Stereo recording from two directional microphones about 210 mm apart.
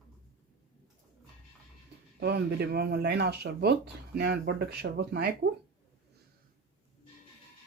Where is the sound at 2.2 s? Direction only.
50° right (ahead or behind).